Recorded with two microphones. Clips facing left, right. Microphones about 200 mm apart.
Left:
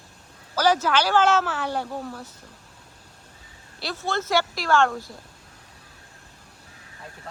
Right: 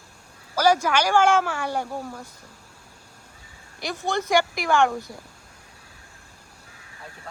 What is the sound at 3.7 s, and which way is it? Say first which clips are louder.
Speech: right 1 dB; 15° right (ahead or behind).